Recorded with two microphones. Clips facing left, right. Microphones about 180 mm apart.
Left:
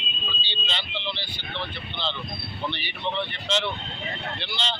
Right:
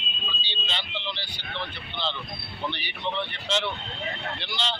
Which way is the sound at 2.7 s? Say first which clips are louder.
Left 2 dB; 10° right (ahead or behind).